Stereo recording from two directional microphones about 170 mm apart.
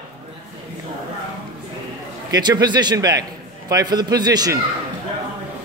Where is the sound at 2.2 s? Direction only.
25° right (ahead or behind).